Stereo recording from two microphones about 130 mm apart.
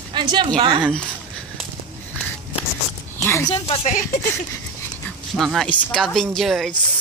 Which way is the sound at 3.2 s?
20° left (ahead or behind).